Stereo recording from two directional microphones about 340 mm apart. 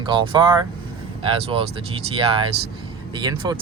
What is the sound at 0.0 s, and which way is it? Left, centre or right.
Speech, centre.